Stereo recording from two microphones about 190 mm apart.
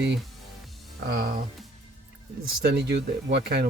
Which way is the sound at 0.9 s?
55° right (ahead or behind).